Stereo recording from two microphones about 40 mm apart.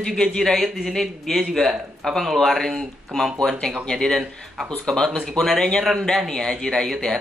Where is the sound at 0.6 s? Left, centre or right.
Centre.